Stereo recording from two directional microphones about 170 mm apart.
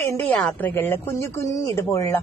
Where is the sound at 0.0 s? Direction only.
10° left (ahead or behind).